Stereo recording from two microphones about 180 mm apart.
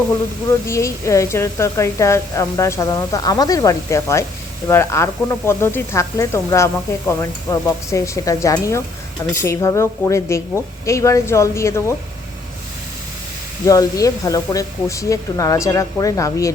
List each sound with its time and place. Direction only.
0.7 s speech: 15° left (ahead or behind)
13.7 s speech: 20° left (ahead or behind)